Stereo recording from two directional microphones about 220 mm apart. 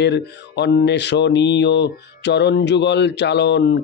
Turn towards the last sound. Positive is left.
turn(degrees=50)  # may be behind; listen again after turning